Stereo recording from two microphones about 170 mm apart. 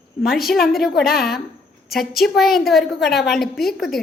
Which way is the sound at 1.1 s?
65° left (ahead or behind).